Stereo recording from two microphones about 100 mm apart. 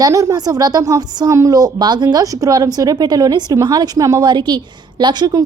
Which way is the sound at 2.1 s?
35° right (ahead or behind).